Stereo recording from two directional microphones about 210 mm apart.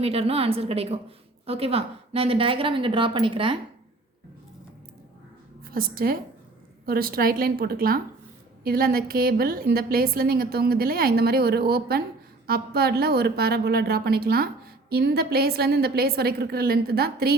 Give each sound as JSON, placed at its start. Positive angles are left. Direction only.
{"t": 0.0, "sound": "a woman's voice", "side_deg": -30}
{"t": 5.7, "sound": "a woman's voice", "side_deg": -45}